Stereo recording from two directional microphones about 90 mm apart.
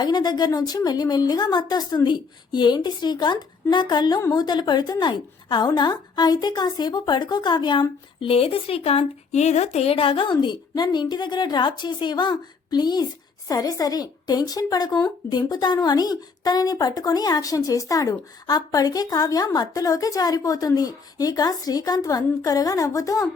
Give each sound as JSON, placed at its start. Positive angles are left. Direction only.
{"t": 0.0, "sound": "a woman's voice", "side_deg": 50}